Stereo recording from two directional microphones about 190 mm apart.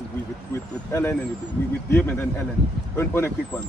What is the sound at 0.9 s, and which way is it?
Speech, 15° left (ahead or behind).